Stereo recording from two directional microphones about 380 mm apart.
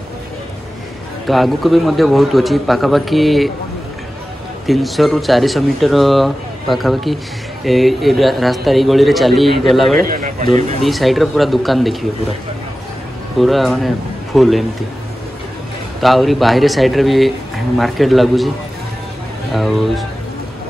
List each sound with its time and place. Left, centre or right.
1.2 s speech: centre
4.6 s speech: centre
10.0 s speech: right
10.8 s speech: centre
13.4 s a man's voice: centre
16.0 s speech: centre
19.5 s speech: centre